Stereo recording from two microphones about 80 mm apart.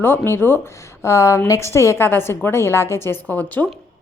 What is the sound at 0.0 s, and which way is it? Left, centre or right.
A woman's voice, left.